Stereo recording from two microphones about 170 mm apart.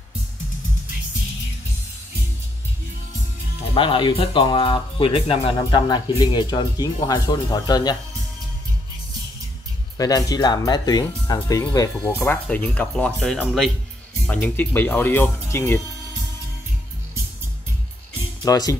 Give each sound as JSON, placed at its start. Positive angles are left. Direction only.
{"t": 3.7, "sound": "speech", "side_deg": 30}
{"t": 9.9, "sound": "speech", "side_deg": 20}
{"t": 18.4, "sound": "speech", "side_deg": 20}